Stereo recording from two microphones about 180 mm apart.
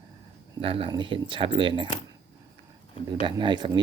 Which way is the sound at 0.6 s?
30° right (ahead or behind).